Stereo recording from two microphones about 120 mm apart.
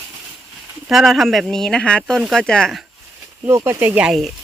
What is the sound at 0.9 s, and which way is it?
Speech, centre (ahead or behind).